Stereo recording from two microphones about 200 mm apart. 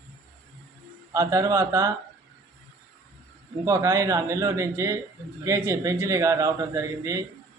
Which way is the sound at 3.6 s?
15° right (ahead or behind).